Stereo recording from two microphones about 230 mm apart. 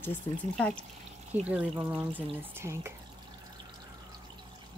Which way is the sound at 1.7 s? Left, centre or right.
Centre.